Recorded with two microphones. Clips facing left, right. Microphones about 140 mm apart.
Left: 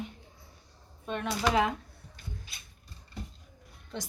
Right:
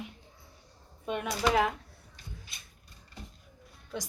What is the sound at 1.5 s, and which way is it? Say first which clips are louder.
Speech: even; centre (ahead or behind).